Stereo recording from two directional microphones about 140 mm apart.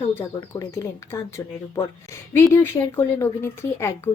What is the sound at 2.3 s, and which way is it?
A woman's voice, 20° left (ahead or behind).